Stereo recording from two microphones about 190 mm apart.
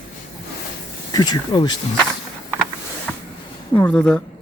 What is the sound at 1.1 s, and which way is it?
Speech, 20° left (ahead or behind).